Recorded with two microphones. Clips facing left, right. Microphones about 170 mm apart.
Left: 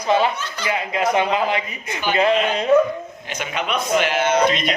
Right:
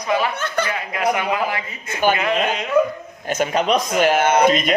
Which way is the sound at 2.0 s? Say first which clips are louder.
Right 5 dB; 50° right (ahead or behind).